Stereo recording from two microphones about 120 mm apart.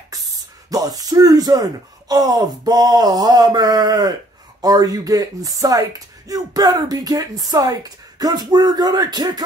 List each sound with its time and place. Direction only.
0.7 s speech: 30° right (ahead or behind)